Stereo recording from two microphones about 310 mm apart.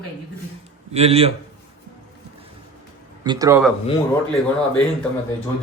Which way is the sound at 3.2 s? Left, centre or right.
Centre.